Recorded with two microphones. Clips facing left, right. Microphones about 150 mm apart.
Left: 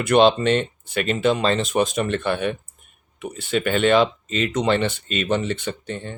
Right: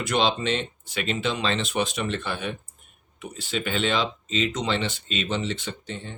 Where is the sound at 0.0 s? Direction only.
55° left (ahead or behind).